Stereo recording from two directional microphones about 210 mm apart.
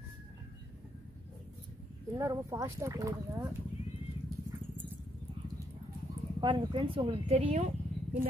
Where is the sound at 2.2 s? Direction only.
15° right (ahead or behind).